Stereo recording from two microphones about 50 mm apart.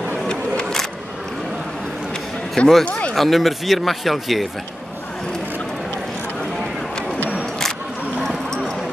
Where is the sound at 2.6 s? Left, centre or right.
Centre.